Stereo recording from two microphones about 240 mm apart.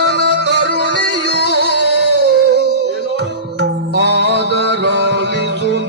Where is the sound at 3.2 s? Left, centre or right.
Right.